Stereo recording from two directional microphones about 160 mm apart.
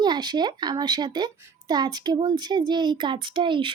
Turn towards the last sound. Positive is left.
turn(degrees=-30)  # may be behind; listen again after turning